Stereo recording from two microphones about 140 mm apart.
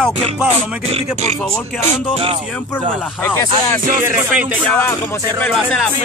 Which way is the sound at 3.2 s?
15° left (ahead or behind).